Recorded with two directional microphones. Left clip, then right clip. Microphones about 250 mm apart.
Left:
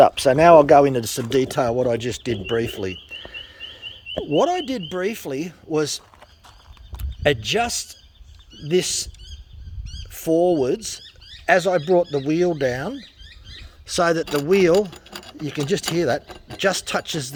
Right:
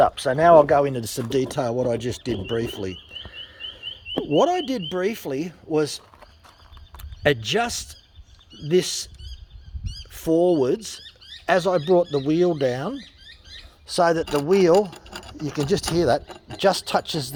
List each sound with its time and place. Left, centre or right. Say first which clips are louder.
0.0 s speech: left 4 dB; left
0.9 s speech: left 4 dB; centre
10.1 s speech: left 1 dB; centre
13.8 s speech: even; centre